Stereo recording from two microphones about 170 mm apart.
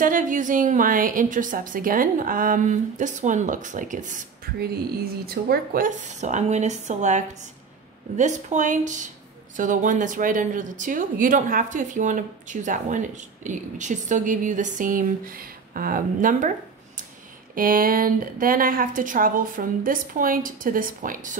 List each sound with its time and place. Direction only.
0.0 s speech: 50° right (ahead or behind)
5.2 s speech: 65° right (ahead or behind)